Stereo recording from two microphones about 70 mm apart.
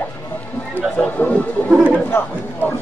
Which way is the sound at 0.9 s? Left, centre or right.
Left.